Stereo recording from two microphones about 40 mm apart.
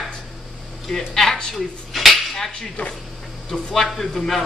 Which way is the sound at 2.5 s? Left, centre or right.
Left.